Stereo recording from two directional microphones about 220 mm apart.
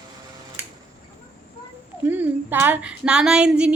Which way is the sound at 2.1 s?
10° right (ahead or behind).